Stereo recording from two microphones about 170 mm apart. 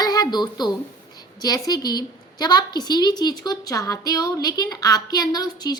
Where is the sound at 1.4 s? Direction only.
25° left (ahead or behind).